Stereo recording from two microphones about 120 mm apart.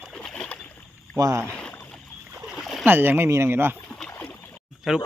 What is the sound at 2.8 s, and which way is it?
Speech, 20° right (ahead or behind).